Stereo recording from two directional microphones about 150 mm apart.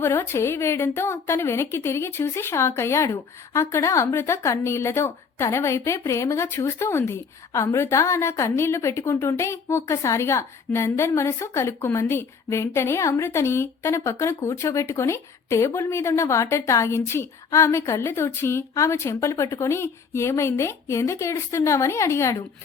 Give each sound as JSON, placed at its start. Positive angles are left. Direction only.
{"t": 0.0, "sound": "a woman's voice", "side_deg": 15}